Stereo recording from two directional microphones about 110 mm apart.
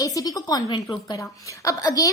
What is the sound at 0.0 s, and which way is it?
A woman's voice, 35° left (ahead or behind).